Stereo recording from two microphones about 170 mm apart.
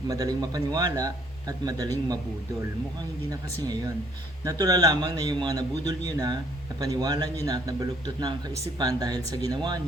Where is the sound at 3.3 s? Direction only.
20° right (ahead or behind).